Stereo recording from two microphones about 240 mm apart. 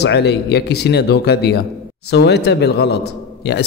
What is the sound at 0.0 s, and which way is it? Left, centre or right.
A man's voice, left.